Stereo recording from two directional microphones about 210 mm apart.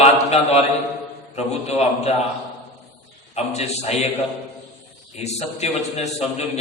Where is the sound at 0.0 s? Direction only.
30° left (ahead or behind).